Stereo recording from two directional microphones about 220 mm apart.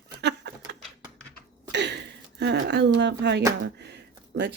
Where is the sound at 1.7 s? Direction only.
50° right (ahead or behind).